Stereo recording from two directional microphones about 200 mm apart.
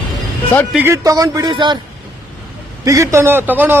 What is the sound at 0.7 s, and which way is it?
A man's voice, 15° right (ahead or behind).